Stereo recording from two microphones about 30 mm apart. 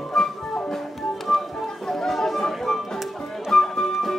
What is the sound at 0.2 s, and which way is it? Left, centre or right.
Music, centre.